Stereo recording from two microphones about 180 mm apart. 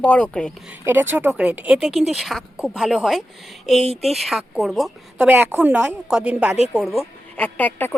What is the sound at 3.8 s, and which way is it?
Speech, 35° right (ahead or behind).